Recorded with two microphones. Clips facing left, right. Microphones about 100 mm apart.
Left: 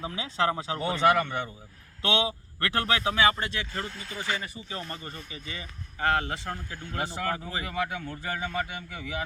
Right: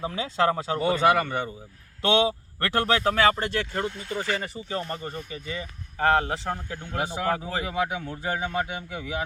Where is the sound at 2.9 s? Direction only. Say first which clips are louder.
Right 2 dB; 45° right (ahead or behind).